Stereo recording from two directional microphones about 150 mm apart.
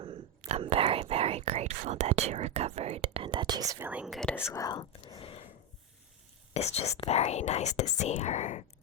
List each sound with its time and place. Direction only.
0.0 s whispering: 40° right (ahead or behind)
1.9 s speech: 45° right (ahead or behind); by 4.0 s 15° right (ahead or behind)
4.0 s speech: centre (ahead or behind)
4.4 s speech: 20° left (ahead or behind)
4.9 s a sound: 35° left (ahead or behind)
6.5 s speech: 45° left (ahead or behind)